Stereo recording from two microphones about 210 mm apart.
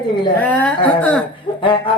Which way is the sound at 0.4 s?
5° left (ahead or behind).